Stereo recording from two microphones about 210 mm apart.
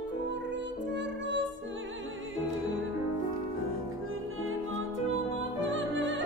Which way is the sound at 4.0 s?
80° right.